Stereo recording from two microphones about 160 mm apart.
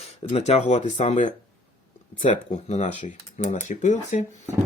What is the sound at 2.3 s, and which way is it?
Speech, 50° left (ahead or behind).